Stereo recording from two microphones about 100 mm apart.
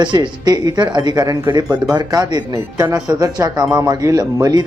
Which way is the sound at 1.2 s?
35° right (ahead or behind).